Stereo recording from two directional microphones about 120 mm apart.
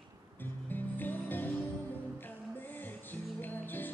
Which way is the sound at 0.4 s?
15° left (ahead or behind).